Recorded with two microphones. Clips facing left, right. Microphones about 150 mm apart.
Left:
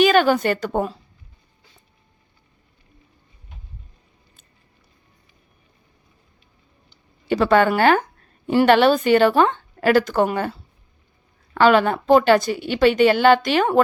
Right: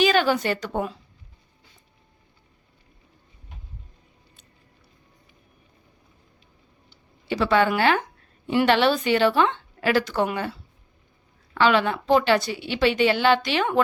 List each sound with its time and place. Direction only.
0.0 s a woman's voice: 50° left (ahead or behind)
7.3 s a woman's voice: 50° left (ahead or behind)
11.5 s a woman's voice: 45° left (ahead or behind)